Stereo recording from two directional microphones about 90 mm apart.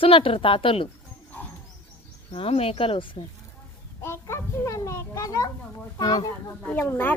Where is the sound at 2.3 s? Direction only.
90° left.